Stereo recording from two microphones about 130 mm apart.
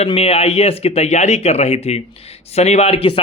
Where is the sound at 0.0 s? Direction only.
50° left (ahead or behind).